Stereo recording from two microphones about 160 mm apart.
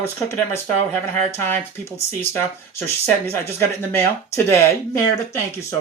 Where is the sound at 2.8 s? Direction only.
15° left (ahead or behind).